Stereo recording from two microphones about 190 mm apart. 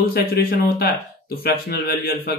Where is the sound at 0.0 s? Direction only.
50° left (ahead or behind).